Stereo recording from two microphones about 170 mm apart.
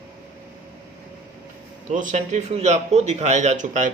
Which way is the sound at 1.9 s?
45° right (ahead or behind).